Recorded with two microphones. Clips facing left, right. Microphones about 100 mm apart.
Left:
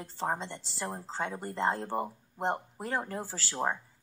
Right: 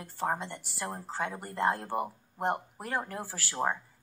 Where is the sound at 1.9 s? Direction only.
15° right (ahead or behind).